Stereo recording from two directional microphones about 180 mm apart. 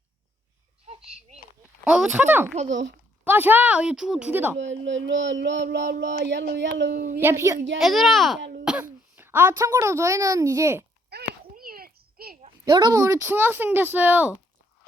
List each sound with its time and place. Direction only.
1.8 s speech: 5° right (ahead or behind)
2.6 s speech: 85° right
3.2 s speech: 10° right (ahead or behind)
4.5 s speech: 85° right
6.0 s a sound: 80° right
6.9 s a woman's voice: 50° right (ahead or behind)
7.2 s speech: 15° right (ahead or behind)
7.8 s a child's voice: centre (ahead or behind); by 10.8 s 15° right (ahead or behind)
11.1 s a sound: 60° right (ahead or behind)
12.6 s speech: 25° right (ahead or behind)